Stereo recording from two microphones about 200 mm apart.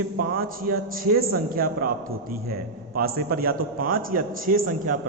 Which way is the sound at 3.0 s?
50° right (ahead or behind).